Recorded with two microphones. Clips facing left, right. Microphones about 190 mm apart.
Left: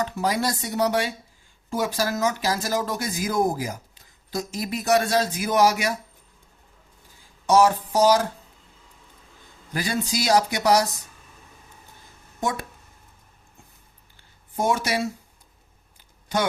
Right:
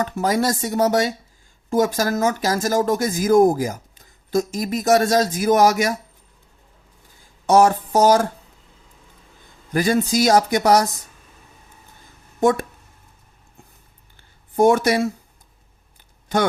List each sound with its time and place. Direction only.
0.0 s speech: 45° right (ahead or behind)
7.4 s speech: 55° right (ahead or behind)
9.7 s speech: 50° right (ahead or behind)
12.4 s speech: 50° right (ahead or behind)
14.5 s speech: 55° right (ahead or behind)